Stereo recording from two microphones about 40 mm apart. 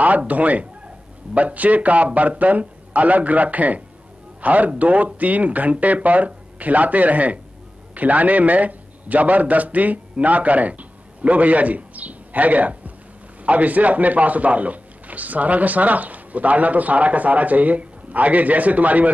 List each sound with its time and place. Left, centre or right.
0.3 s a man's voice: right